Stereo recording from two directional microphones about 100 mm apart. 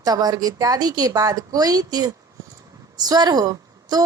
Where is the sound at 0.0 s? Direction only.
40° right (ahead or behind).